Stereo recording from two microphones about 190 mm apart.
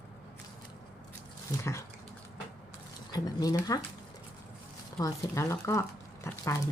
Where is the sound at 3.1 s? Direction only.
20° left (ahead or behind).